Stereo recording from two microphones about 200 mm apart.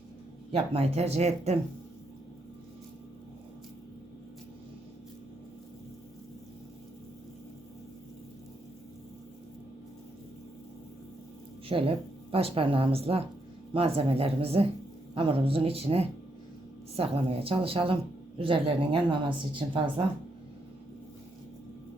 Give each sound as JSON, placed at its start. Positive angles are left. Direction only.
{"t": 0.5, "sound": "speech", "side_deg": -30}
{"t": 11.7, "sound": "speech", "side_deg": -30}